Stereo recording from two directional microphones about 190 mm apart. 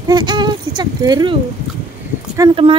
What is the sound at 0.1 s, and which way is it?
Speech, 20° right (ahead or behind).